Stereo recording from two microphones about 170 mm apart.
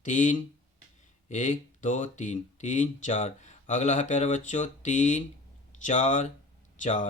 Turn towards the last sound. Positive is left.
turn(degrees=45)  # may be behind; listen again after turning